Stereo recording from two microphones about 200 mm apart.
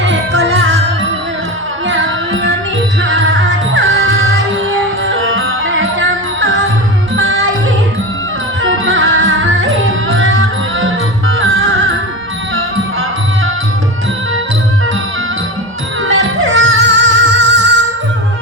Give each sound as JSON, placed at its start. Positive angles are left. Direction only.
{"t": 0.0, "sound": "music", "side_deg": -75}
{"t": 1.9, "sound": "carnatic music", "side_deg": -70}
{"t": 3.0, "sound": "music", "side_deg": -75}
{"t": 8.6, "sound": "music", "side_deg": -75}
{"t": 11.3, "sound": "music", "side_deg": -85}
{"t": 16.4, "sound": "music", "side_deg": -75}